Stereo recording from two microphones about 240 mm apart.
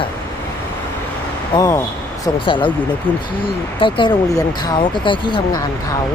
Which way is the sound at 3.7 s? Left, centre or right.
Left.